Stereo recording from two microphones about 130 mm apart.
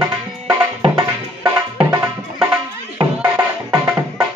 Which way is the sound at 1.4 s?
15° right (ahead or behind).